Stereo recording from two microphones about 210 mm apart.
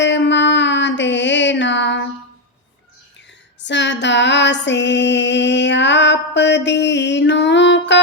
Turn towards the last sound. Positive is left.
turn(degrees=55)  # may be behind; listen again after turning